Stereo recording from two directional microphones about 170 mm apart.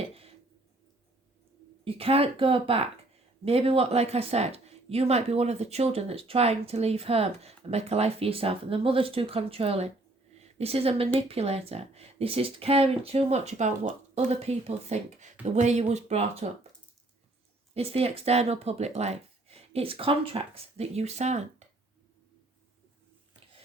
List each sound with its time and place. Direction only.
0.0 s a sound: 35° right (ahead or behind)
1.8 s a woman's voice: 35° right (ahead or behind)
17.7 s speech: 35° right (ahead or behind)